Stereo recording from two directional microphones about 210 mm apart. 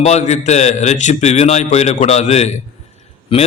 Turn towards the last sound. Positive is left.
turn(degrees=25)  # may be behind; listen again after turning